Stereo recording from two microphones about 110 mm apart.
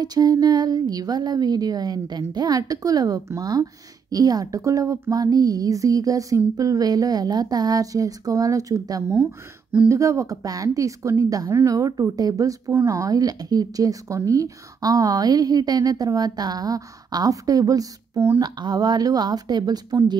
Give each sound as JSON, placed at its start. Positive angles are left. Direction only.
{"t": 0.0, "sound": "a woman's voice", "side_deg": -35}
{"t": 18.4, "sound": "a woman's voice", "side_deg": -40}